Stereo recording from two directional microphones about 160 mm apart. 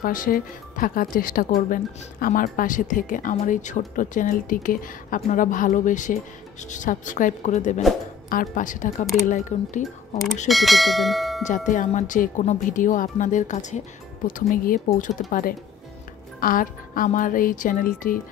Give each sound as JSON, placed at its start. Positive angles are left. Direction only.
{"t": 0.0, "sound": "speech", "side_deg": 60}
{"t": 8.3, "sound": "speech", "side_deg": 60}
{"t": 10.5, "sound": "speech", "side_deg": 0}
{"t": 11.4, "sound": "speech", "side_deg": 50}